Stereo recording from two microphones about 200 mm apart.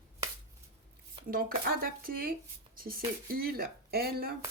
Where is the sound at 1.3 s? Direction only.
45° right (ahead or behind).